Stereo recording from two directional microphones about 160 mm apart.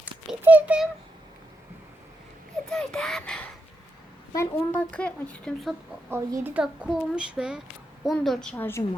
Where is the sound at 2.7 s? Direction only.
5° left (ahead or behind).